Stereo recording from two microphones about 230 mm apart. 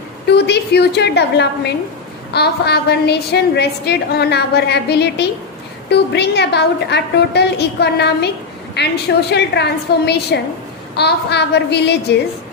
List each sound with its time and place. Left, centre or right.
0.3 s a woman's voice: left